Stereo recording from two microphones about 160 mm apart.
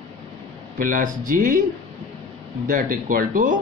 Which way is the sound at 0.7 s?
60° right (ahead or behind).